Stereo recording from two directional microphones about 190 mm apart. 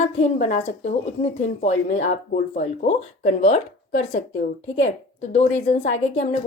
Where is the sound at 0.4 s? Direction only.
40° left (ahead or behind).